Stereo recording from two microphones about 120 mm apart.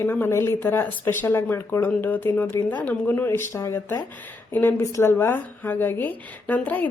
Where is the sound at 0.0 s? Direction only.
20° left (ahead or behind).